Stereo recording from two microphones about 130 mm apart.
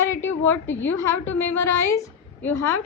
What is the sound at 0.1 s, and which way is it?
A woman's voice, 15° left (ahead or behind).